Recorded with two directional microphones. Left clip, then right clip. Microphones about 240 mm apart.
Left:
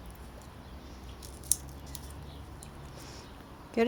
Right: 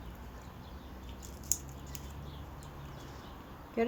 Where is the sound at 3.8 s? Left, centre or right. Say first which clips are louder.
Left 4 dB; left.